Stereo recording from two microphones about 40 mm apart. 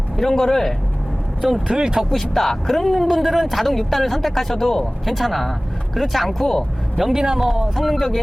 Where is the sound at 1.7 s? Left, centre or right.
Centre.